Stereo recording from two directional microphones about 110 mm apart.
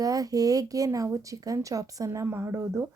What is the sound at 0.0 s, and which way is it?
Speech, 35° right (ahead or behind).